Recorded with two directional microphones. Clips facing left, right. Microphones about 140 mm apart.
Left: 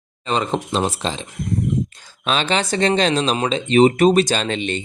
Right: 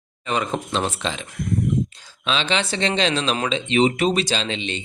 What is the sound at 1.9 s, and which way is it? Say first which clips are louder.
Speech: left 3 dB; 50° left (ahead or behind).